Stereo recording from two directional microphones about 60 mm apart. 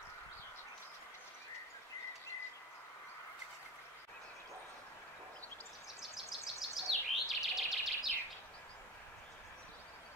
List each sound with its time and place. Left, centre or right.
5.9 s bird vocalization: centre